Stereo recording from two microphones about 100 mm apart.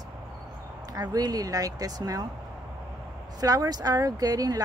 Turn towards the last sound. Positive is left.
turn(degrees=-40)  # may be behind; listen again after turning